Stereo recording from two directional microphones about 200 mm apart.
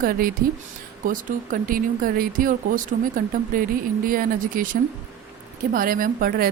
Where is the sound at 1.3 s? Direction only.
40° right (ahead or behind).